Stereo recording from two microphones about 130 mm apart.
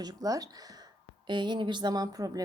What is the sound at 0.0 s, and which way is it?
Speech, 30° right (ahead or behind).